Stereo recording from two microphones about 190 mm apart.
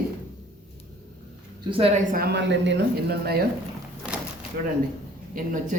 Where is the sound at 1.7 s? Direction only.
30° right (ahead or behind).